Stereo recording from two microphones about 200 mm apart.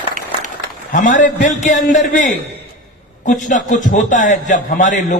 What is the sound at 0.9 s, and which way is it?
A man's voice, 40° left (ahead or behind).